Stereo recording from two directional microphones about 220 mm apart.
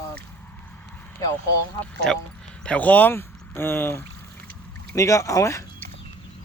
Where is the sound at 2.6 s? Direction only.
5° left (ahead or behind).